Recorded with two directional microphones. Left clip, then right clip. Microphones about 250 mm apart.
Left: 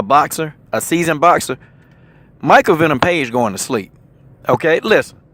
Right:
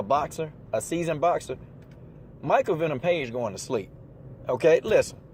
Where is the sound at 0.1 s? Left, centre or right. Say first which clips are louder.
Left 13 dB; left.